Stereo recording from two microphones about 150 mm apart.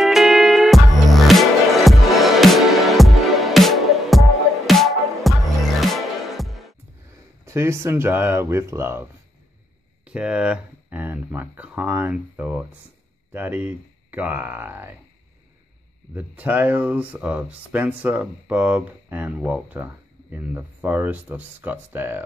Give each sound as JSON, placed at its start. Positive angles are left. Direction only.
{"t": 0.0, "sound": "music", "side_deg": 0}
{"t": 7.4, "sound": "speech", "side_deg": -15}
{"t": 16.2, "sound": "speech", "side_deg": -10}